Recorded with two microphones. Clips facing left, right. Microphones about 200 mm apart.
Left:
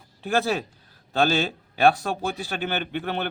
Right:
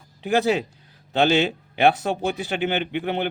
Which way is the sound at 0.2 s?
15° right (ahead or behind).